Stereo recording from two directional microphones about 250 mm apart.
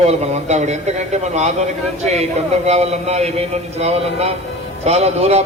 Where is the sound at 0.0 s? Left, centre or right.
Right.